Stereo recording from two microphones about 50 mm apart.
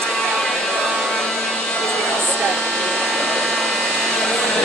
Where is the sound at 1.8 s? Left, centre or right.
Centre.